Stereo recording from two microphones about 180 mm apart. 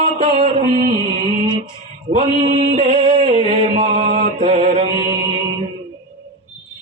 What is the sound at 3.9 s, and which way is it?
Mantra, 50° right (ahead or behind).